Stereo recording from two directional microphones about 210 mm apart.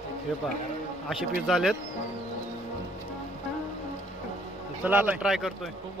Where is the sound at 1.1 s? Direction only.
Centre (ahead or behind).